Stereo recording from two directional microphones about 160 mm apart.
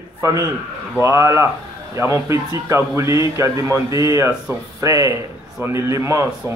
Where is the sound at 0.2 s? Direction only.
20° right (ahead or behind).